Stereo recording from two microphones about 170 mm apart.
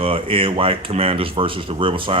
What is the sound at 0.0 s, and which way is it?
Speech, 30° right (ahead or behind).